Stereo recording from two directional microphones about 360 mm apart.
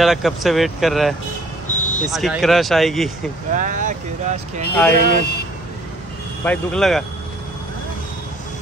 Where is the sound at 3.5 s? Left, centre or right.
Right.